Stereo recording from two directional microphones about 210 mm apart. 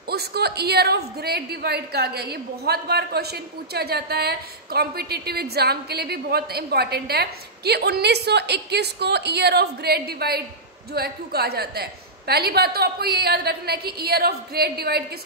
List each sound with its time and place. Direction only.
0.1 s a woman's voice: 50° right (ahead or behind)